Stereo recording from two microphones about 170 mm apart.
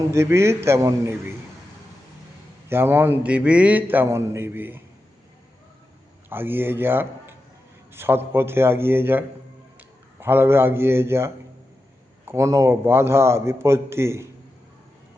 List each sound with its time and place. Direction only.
0.1 s a man's voice: 15° right (ahead or behind)
2.6 s a man's voice: 15° right (ahead or behind)
6.2 s a man's voice: 10° right (ahead or behind)